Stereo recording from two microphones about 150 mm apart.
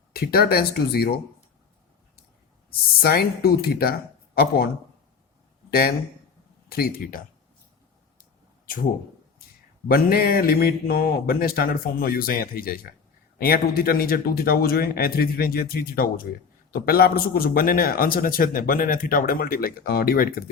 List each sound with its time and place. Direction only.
0.1 s speech: 90° left
3.0 s speech: 90° left
6.7 s a man's voice: 85° left; by 7.3 s 65° left (ahead or behind)
8.2 s a sound: 70° left (ahead or behind)
9.9 s a man's voice: 85° left